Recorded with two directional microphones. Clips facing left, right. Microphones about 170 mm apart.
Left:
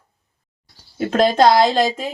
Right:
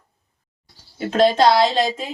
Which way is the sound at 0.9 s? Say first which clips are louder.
Left 1 dB; 45° left (ahead or behind).